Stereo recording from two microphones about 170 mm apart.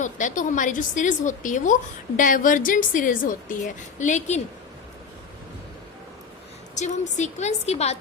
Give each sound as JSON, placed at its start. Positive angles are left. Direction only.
{"t": 0.0, "sound": "a woman's voice", "side_deg": 50}
{"t": 6.7, "sound": "a woman's voice", "side_deg": 45}